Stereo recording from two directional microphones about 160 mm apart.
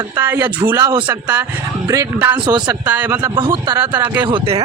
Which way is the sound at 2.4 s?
30° right (ahead or behind).